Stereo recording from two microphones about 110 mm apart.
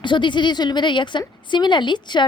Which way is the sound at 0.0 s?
45° left (ahead or behind).